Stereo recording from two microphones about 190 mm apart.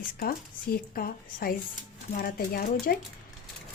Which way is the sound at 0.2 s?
50° left (ahead or behind).